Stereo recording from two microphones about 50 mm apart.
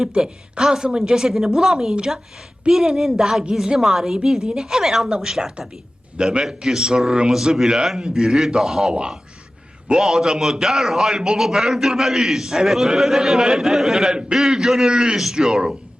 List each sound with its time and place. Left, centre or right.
0.1 s a man's voice: centre